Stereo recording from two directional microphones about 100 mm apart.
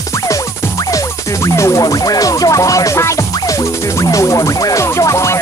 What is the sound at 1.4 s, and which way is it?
Music, 30° left (ahead or behind).